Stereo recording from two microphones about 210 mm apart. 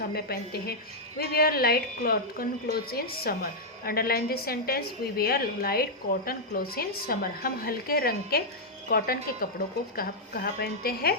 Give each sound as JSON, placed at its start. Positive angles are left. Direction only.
{"t": 0.0, "sound": "a woman's voice", "side_deg": 45}